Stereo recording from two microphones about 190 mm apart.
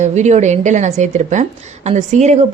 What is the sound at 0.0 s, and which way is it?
A woman's voice, 40° right (ahead or behind).